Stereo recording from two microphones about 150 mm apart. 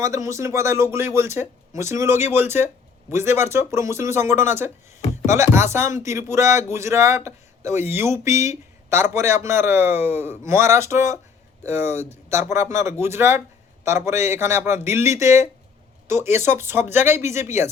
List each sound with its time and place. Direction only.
0.0 s speech: 20° right (ahead or behind)